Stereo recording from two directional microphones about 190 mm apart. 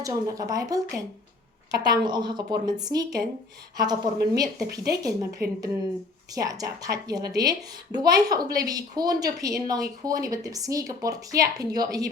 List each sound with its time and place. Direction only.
0.0 s a woman's voice: 20° right (ahead or behind)